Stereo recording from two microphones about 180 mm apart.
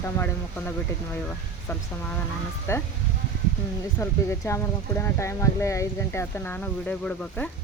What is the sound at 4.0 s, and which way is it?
Speech, 15° left (ahead or behind).